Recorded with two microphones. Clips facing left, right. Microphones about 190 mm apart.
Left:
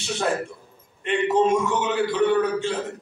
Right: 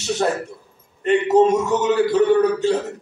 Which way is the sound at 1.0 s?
40° right (ahead or behind).